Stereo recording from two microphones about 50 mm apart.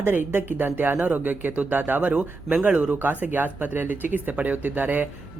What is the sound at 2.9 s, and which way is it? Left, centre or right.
Speech, right.